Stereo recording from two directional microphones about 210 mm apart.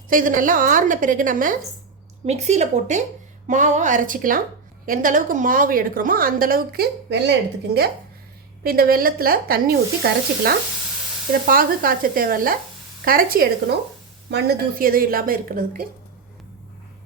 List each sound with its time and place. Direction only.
0.1 s a woman's voice: 40° right (ahead or behind)